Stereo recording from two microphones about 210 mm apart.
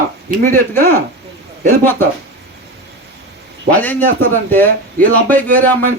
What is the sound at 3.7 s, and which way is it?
A man's voice, 10° left (ahead or behind).